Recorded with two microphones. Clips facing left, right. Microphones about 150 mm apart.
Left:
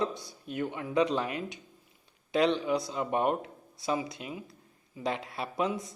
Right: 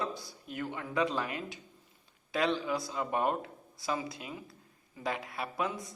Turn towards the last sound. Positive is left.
turn(degrees=25)  # may be behind; listen again after turning